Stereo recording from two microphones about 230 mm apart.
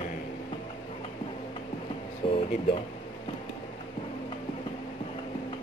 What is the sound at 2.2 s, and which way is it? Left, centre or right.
Speech, left.